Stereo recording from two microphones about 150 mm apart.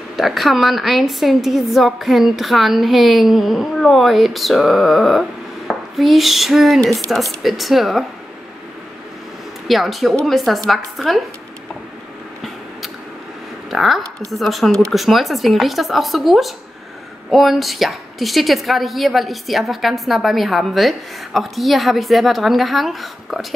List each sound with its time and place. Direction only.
0.1 s a woman's voice: centre (ahead or behind)
9.7 s a woman's voice: centre (ahead or behind)
13.7 s a woman's voice: centre (ahead or behind)